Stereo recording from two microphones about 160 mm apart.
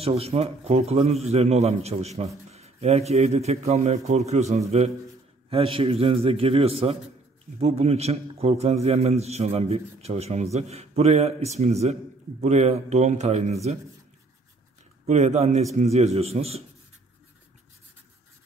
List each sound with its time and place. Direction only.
0.0 s a man's voice: 40° right (ahead or behind)
15.0 s a man's voice: 45° right (ahead or behind)